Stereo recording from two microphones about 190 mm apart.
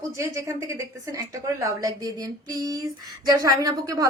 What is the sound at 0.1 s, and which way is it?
A woman's voice, 15° right (ahead or behind).